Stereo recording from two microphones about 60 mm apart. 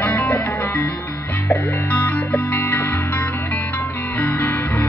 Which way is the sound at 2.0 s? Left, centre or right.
Left.